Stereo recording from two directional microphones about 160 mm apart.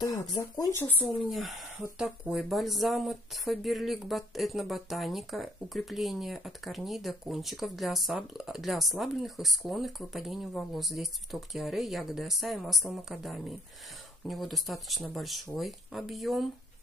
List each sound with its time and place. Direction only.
0.0 s speech: 20° left (ahead or behind)
1.0 s speech: centre (ahead or behind)